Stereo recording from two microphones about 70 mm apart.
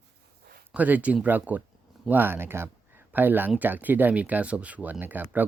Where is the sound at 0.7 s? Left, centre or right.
Right.